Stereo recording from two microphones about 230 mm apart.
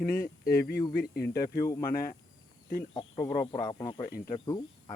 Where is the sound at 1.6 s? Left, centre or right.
Centre.